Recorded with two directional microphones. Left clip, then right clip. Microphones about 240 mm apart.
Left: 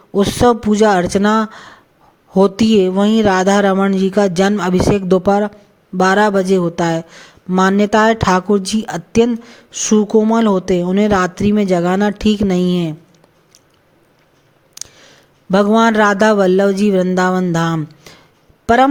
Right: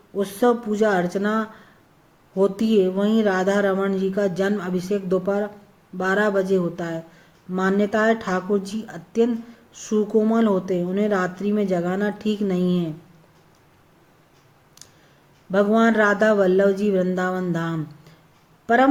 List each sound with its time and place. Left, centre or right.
0.1 s speech: left
14.8 s speech: left